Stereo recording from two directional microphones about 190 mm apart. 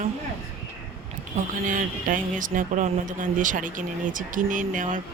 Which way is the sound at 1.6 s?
45° right (ahead or behind).